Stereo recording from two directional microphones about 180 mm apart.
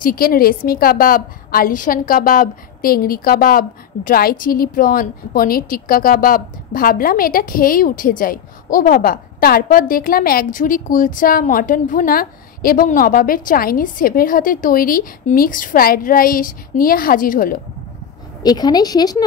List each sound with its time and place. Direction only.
0.0 s a woman's voice: 55° left (ahead or behind)
18.4 s a woman's voice: 20° left (ahead or behind)